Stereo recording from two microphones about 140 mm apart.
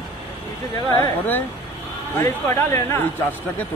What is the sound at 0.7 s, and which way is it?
A man's voice, 15° left (ahead or behind).